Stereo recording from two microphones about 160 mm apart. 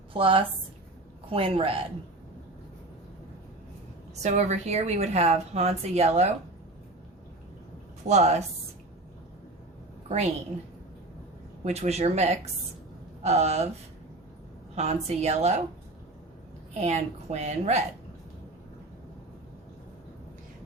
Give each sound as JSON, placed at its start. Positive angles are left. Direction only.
{"t": 0.1, "sound": "a woman's voice", "side_deg": -35}
{"t": 4.1, "sound": "a woman's voice", "side_deg": -45}
{"t": 8.0, "sound": "a woman's voice", "side_deg": -45}
{"t": 10.1, "sound": "a woman's voice", "side_deg": -45}
{"t": 11.6, "sound": "a woman's voice", "side_deg": -40}
{"t": 14.8, "sound": "a woman's voice", "side_deg": -45}
{"t": 16.8, "sound": "a woman's voice", "side_deg": -45}